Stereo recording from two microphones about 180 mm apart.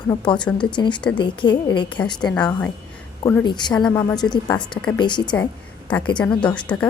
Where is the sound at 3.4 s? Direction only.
25° left (ahead or behind).